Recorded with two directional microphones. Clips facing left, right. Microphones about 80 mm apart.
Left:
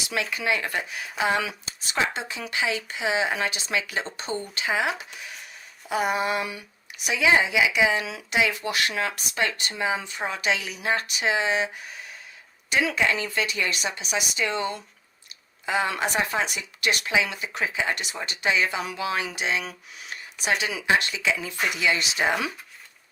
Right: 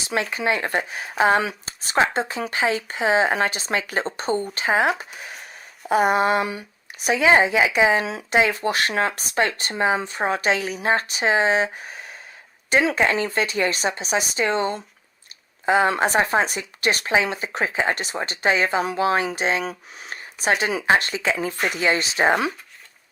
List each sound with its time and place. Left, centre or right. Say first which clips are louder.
0.0 s a woman's voice: right 4 dB; right